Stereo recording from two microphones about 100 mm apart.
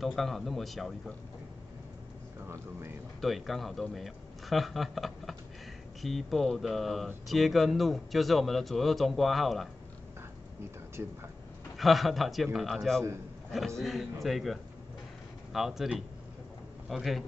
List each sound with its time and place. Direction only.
0.0 s a man's voice: centre (ahead or behind)
2.4 s speech: 25° right (ahead or behind)
3.2 s a man's voice: centre (ahead or behind)
11.0 s speech: 25° right (ahead or behind)
11.7 s a man's voice: centre (ahead or behind)
16.9 s a man's voice: centre (ahead or behind)